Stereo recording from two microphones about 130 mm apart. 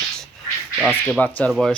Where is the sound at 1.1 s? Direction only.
10° left (ahead or behind).